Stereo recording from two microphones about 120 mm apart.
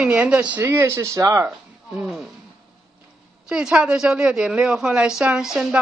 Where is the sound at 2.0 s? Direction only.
Centre (ahead or behind).